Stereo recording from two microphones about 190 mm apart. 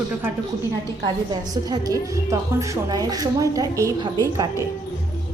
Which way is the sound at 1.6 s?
20° right (ahead or behind).